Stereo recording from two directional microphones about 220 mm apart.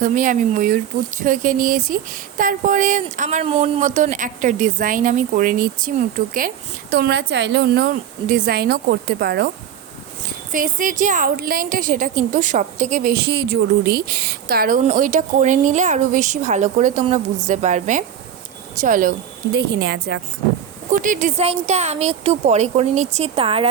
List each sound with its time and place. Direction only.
0.0 s a woman's voice: 35° right (ahead or behind)
10.5 s a woman's voice: 40° right (ahead or behind)
19.5 s a woman's voice: 50° right (ahead or behind)
20.9 s speech: 35° right (ahead or behind)